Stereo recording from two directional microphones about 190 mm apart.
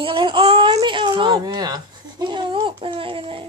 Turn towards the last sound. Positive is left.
turn(degrees=-25)  # may be behind; listen again after turning